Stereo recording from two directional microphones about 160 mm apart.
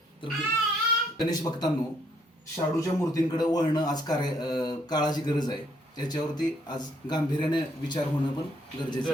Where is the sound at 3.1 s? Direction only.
25° left (ahead or behind).